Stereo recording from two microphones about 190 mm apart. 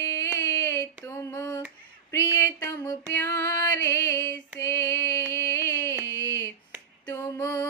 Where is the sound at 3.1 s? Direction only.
15° left (ahead or behind).